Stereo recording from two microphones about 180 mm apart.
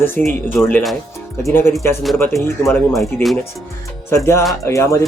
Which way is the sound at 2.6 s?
10° left (ahead or behind).